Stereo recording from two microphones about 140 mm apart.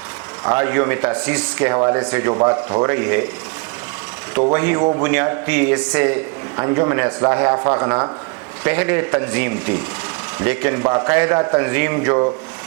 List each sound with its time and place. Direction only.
0.5 s a man's voice: 15° right (ahead or behind)
2.3 s a man's voice: 30° right (ahead or behind)
2.9 s a man's voice: 15° right (ahead or behind)
4.5 s a man's voice: 15° right (ahead or behind)
8.6 s a man's voice: 15° right (ahead or behind)